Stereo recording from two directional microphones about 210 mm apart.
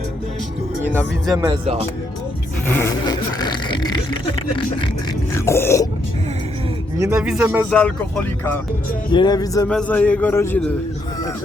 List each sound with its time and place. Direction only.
0.9 s speech: 15° right (ahead or behind)
2.6 s speech: 10° left (ahead or behind)
5.3 s grunt: 10° left (ahead or behind)
7.0 s speech: 10° right (ahead or behind)
7.7 s speech: 5° left (ahead or behind)
9.1 s a man's voice: 20° left (ahead or behind)
9.6 s a man's voice: 5° left (ahead or behind)